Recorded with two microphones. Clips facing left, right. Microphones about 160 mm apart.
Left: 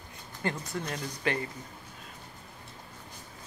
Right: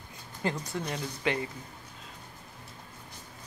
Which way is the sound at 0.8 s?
15° right (ahead or behind).